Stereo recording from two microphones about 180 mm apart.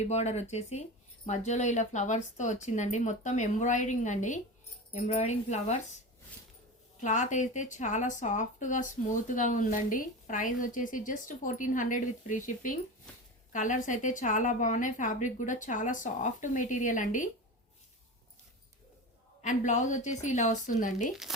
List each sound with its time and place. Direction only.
0.0 s speech: 40° left (ahead or behind)
7.0 s speech: 45° left (ahead or behind)
19.4 s speech: 45° left (ahead or behind)
21.3 s speech: centre (ahead or behind)